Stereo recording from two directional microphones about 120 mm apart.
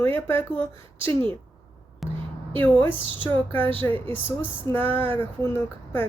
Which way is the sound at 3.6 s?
50° right (ahead or behind).